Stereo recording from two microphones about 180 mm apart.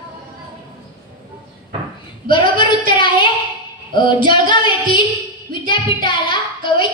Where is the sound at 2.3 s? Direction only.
25° left (ahead or behind).